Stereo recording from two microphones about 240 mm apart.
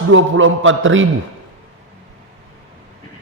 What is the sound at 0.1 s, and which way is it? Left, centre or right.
Speech, right.